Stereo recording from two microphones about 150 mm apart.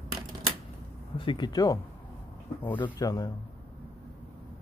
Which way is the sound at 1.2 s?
30° left (ahead or behind).